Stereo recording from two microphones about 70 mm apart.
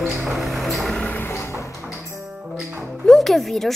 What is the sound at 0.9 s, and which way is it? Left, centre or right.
Music, left.